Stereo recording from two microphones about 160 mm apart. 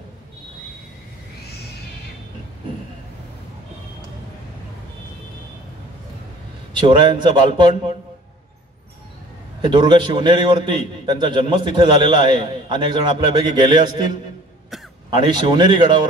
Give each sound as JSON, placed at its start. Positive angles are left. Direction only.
{"t": 6.7, "sound": "a man's voice", "side_deg": -30}
{"t": 9.6, "sound": "a man's voice", "side_deg": -30}